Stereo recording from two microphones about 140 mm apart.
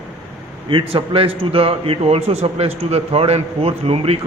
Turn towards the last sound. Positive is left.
turn(degrees=-45)  # may be behind; listen again after turning